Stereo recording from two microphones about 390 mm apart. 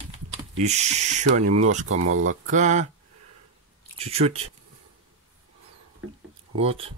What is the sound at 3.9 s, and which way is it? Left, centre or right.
Speech, centre.